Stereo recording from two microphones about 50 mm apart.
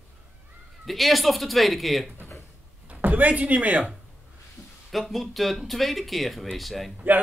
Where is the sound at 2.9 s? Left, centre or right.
Right.